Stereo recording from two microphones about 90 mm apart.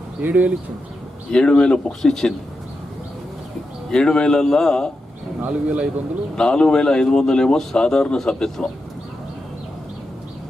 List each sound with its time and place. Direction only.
0.2 s a man's voice: 20° right (ahead or behind)
1.3 s speech: 10° left (ahead or behind)
3.9 s speech: 10° left (ahead or behind)
5.4 s a man's voice: 10° right (ahead or behind)
6.3 s speech: 10° left (ahead or behind)